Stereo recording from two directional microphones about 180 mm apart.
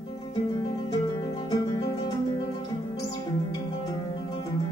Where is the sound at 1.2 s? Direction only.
20° left (ahead or behind).